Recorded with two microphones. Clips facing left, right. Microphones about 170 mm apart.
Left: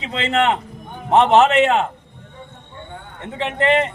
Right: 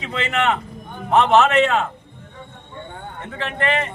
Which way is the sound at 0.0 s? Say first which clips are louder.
Left 3 dB; 25° left (ahead or behind).